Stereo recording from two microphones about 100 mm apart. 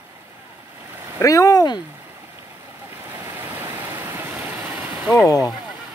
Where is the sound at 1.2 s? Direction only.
35° left (ahead or behind).